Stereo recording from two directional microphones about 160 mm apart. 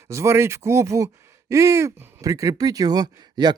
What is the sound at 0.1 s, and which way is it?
Speech, 20° right (ahead or behind).